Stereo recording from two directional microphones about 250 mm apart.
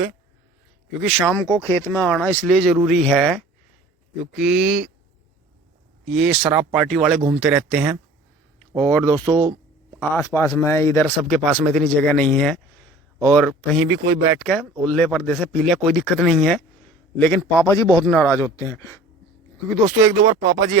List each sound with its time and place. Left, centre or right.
1.3 s speech: centre
6.1 s speech: centre
8.5 s speech: centre
9.4 s a sound: centre
10.0 s speech: centre
13.5 s speech: centre
14.4 s speech: centre
20.0 s speech: centre